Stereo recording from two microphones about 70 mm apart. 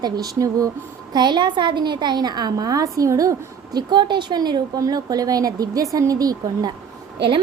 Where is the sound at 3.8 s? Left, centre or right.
Right.